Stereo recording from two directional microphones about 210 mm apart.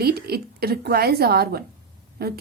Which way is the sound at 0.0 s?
50° right (ahead or behind).